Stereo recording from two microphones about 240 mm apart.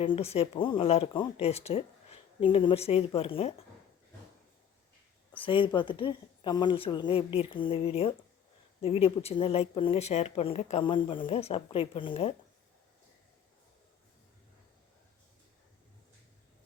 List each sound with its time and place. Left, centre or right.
0.0 s speech: left
5.4 s speech: left